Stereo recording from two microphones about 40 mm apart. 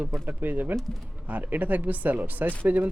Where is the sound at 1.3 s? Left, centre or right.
Right.